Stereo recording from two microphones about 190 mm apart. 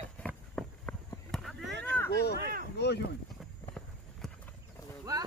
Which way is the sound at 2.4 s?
50° right (ahead or behind).